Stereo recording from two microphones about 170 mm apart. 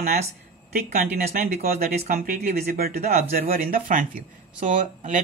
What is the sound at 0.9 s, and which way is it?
Speech, 55° right (ahead or behind).